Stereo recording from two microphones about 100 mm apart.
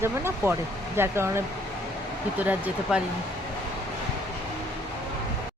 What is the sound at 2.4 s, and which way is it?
Speech, 15° right (ahead or behind).